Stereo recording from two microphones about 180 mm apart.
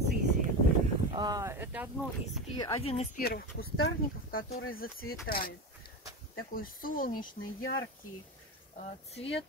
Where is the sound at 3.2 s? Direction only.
60° left (ahead or behind).